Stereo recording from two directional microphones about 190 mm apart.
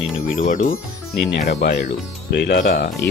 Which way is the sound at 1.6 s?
60° left (ahead or behind).